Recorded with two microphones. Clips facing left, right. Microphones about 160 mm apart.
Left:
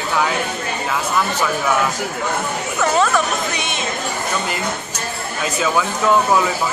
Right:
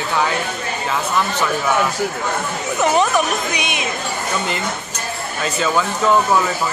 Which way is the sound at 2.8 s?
20° right (ahead or behind).